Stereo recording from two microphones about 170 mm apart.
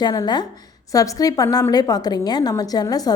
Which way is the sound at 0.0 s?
25° left (ahead or behind).